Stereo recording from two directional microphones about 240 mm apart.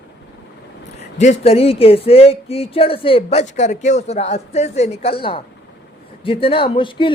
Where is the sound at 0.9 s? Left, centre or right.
Left.